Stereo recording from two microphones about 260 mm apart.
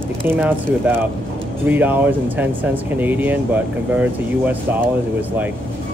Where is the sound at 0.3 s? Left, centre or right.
Centre.